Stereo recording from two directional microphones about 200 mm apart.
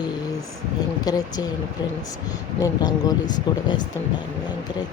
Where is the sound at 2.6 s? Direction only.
20° left (ahead or behind).